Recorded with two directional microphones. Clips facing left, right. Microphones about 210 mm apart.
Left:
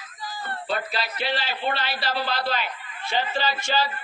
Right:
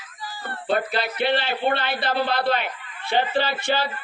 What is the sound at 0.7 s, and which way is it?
A man's voice, 55° right (ahead or behind).